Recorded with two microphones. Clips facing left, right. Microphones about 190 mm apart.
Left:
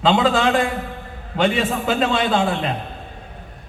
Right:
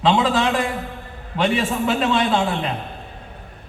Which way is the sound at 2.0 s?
60° left (ahead or behind).